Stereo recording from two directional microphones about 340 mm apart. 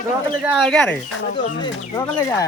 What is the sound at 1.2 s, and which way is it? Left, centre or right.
Speech, left.